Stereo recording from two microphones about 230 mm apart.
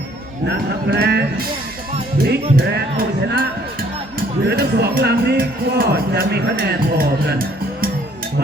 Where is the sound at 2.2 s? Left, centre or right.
Right.